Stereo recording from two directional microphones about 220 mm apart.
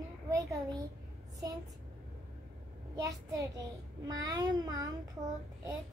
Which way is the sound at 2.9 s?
15° right (ahead or behind).